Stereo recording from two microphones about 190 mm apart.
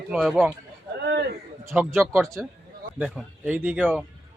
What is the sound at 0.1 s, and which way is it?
Speech, centre (ahead or behind).